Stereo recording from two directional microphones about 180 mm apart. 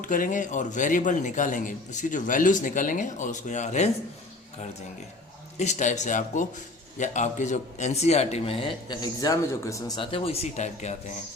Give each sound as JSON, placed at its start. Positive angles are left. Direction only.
{"t": 0.0, "sound": "a man's voice", "side_deg": 45}
{"t": 5.5, "sound": "a man's voice", "side_deg": 40}